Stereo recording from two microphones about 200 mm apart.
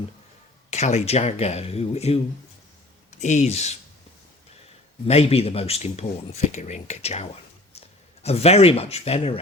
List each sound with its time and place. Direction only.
0.7 s speech: 35° left (ahead or behind)
3.2 s speech: 35° left (ahead or behind)
5.0 s speech: 30° left (ahead or behind)